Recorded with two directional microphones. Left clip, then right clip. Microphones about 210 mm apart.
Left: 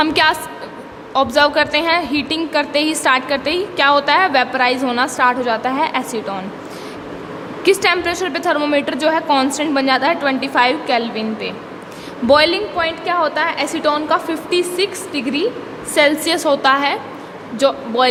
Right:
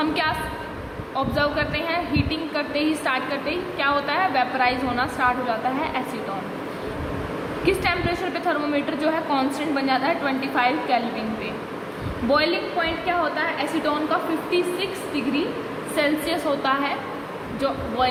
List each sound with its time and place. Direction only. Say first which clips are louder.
0.0 s a woman's voice: left 9 dB; 55° left (ahead or behind)
7.6 s a woman's voice: left 8 dB; 45° left (ahead or behind)
12.3 s a woman's voice: left 8 dB; 50° left (ahead or behind)